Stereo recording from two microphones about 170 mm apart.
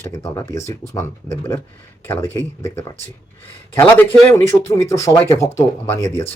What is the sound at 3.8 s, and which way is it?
Speech, 10° left (ahead or behind).